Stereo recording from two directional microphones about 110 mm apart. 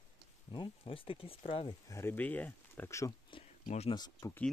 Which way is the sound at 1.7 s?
30° left (ahead or behind).